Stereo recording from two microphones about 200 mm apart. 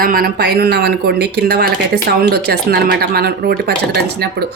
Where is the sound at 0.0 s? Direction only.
45° right (ahead or behind).